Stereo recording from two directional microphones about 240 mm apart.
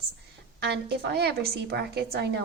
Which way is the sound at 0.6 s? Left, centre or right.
Right.